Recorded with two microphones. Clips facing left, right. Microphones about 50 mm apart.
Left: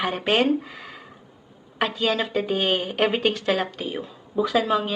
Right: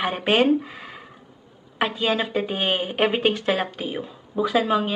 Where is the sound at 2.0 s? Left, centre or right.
Centre.